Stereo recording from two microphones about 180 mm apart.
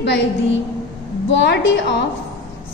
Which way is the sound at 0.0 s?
75° left (ahead or behind).